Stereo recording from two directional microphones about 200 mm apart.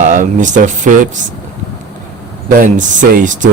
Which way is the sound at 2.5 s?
40° right (ahead or behind).